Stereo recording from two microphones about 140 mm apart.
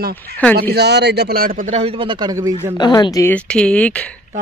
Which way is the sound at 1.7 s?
45° right (ahead or behind).